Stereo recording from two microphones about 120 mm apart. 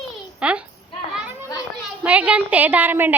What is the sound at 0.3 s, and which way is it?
Speech, 10° right (ahead or behind).